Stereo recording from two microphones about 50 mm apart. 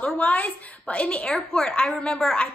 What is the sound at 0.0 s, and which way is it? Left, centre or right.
A woman's voice, left.